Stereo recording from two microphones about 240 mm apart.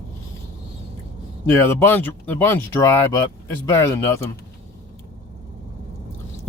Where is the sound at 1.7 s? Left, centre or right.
Centre.